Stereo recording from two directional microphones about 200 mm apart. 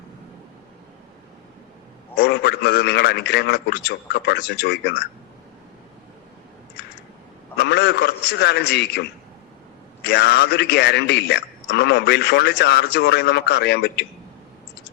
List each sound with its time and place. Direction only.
2.1 s a man's voice: 55° left (ahead or behind)
7.6 s a sound: 55° left (ahead or behind)
10.0 s a man's voice: 55° left (ahead or behind)